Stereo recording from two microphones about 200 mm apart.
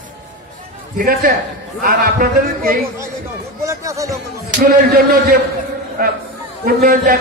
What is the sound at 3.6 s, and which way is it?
Speech, 15° right (ahead or behind).